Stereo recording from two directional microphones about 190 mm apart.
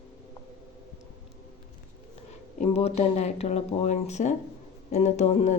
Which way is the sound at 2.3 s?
35° left (ahead or behind).